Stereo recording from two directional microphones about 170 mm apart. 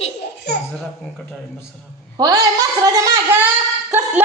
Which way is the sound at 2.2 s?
20° right (ahead or behind).